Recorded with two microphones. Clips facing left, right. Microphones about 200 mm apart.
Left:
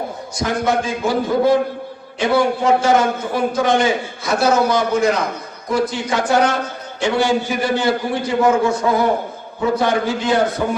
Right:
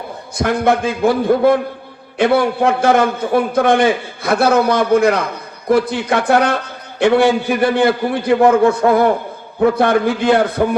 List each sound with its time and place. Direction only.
0.3 s a man's voice: 60° right (ahead or behind)